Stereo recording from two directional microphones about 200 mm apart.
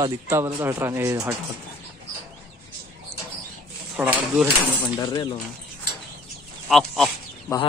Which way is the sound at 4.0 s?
5° right (ahead or behind).